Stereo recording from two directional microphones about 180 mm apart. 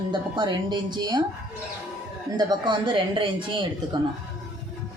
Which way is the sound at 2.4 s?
25° right (ahead or behind).